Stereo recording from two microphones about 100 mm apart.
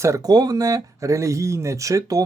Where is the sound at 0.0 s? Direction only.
35° right (ahead or behind).